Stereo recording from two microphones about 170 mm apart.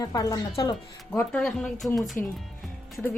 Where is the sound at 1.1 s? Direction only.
10° left (ahead or behind).